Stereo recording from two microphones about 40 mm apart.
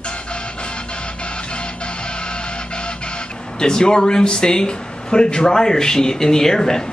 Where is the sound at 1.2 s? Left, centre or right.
Left.